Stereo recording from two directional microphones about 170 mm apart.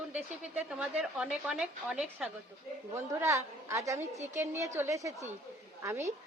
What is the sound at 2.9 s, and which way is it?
A woman's voice, 15° right (ahead or behind).